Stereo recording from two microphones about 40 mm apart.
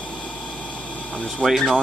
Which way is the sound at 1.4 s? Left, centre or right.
Centre.